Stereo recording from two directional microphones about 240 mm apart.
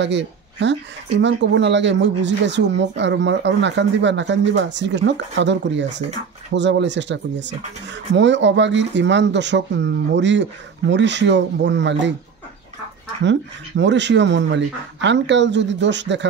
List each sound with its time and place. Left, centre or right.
0.0 s speech: right
13.2 s speech: right